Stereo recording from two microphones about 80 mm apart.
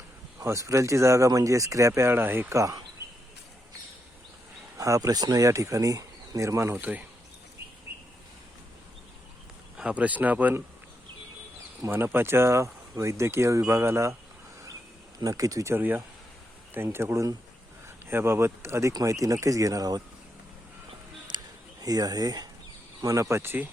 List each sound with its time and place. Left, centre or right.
0.3 s speech: right
2.5 s speech: right
4.8 s speech: right
5.5 s speech: right
9.7 s speech: centre
11.9 s speech: right
15.2 s speech: right
15.7 s speech: right
21.3 s a sound: right
23.0 s speech: right